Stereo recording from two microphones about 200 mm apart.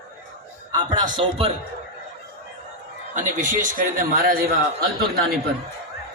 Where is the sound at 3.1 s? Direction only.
40° right (ahead or behind).